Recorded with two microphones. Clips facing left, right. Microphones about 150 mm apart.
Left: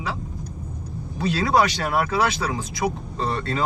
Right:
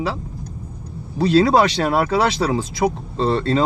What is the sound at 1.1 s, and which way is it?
Speech, 30° right (ahead or behind).